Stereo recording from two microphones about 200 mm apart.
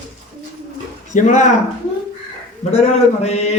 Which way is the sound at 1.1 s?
40° left (ahead or behind).